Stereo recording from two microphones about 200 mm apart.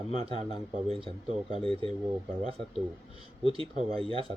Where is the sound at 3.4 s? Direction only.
25° right (ahead or behind).